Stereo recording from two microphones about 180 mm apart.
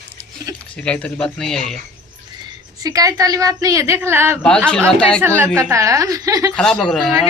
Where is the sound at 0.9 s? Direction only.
5° left (ahead or behind).